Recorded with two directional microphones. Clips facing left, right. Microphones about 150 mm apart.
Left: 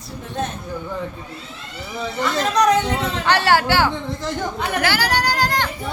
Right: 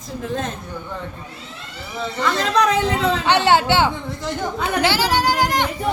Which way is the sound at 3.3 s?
20° right (ahead or behind).